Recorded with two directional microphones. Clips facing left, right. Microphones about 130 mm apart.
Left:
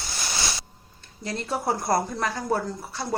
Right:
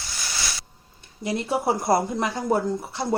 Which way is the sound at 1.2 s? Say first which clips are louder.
Right 4 dB; 15° right (ahead or behind).